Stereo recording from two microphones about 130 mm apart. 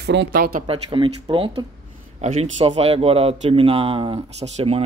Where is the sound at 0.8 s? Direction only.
35° right (ahead or behind).